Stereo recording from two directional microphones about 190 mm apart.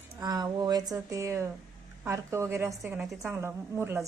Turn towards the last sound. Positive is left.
turn(degrees=-10)  # may be behind; listen again after turning